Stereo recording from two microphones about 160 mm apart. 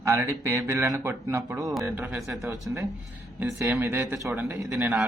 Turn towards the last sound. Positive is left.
turn(degrees=-5)  # may be behind; listen again after turning